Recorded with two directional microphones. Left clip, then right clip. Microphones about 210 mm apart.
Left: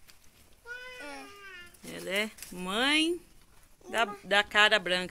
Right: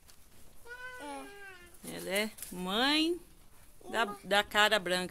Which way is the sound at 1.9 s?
Centre (ahead or behind).